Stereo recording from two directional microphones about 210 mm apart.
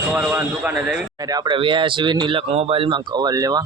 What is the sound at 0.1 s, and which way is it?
A man's voice, 5° right (ahead or behind).